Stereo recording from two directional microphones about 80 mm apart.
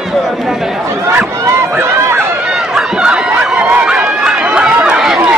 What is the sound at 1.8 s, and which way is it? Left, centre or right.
Run, right.